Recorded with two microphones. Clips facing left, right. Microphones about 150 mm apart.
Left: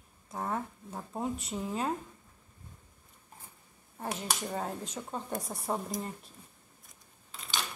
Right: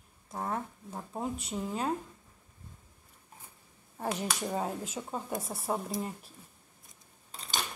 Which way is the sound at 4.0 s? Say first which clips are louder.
Right 2 dB; 15° right (ahead or behind).